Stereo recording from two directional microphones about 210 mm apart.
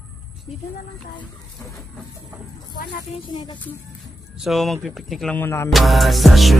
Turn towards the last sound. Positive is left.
turn(degrees=0)  # may be behind; listen again after turning